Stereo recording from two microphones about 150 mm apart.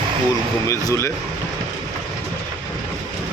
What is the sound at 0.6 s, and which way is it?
Speech, 20° left (ahead or behind).